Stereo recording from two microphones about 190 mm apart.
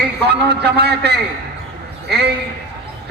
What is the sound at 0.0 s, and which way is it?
A man's voice, 60° right (ahead or behind).